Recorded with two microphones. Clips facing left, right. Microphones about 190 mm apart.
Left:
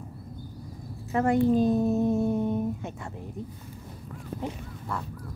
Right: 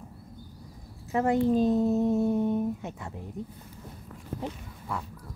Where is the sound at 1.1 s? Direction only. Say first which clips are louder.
Left 1 dB; 20° right (ahead or behind).